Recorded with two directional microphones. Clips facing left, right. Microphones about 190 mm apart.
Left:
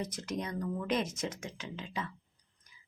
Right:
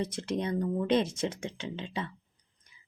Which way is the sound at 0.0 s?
30° right (ahead or behind).